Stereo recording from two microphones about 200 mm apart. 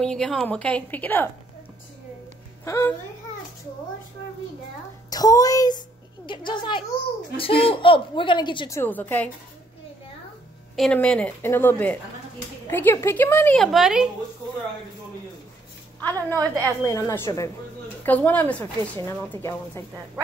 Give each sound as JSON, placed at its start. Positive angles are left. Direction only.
{"t": 0.0, "sound": "a woman's voice", "side_deg": 5}
{"t": 2.6, "sound": "speech", "side_deg": 15}
{"t": 5.1, "sound": "a woman's voice", "side_deg": 20}
{"t": 10.8, "sound": "a woman's voice", "side_deg": 5}
{"t": 16.3, "sound": "a woman's voice", "side_deg": 10}